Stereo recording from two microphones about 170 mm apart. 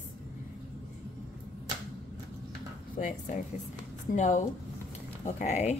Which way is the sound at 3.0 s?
45° left (ahead or behind).